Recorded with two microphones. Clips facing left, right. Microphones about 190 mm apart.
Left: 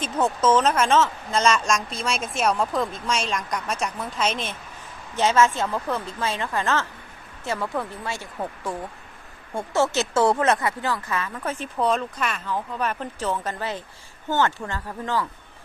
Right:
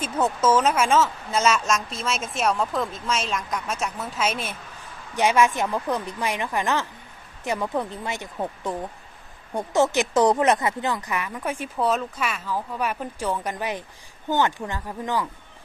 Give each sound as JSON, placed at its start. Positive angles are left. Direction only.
{"t": 0.0, "sound": "speech", "side_deg": -10}